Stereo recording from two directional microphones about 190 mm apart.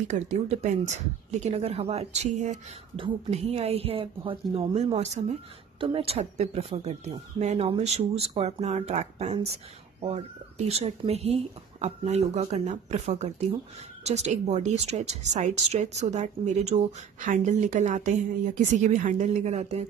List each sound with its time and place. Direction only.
0.1 s speech: 35° right (ahead or behind)